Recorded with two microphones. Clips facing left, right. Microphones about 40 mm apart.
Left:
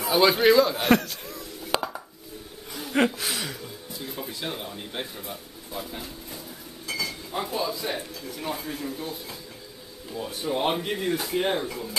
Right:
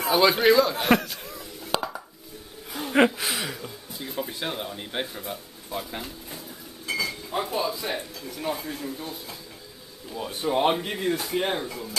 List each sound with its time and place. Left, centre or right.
0.1 s speech: centre
3.2 s speech: centre
6.9 s a sound: centre
7.4 s speech: centre
10.1 s speech: centre
10.7 s speech: centre